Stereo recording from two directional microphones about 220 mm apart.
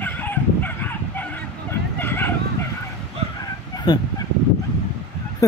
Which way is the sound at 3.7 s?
20° left (ahead or behind).